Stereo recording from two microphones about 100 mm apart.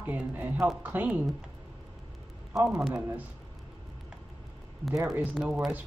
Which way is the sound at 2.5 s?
Centre (ahead or behind).